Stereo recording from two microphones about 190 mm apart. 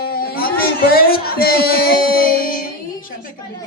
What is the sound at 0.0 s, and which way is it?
Speech, 55° left (ahead or behind).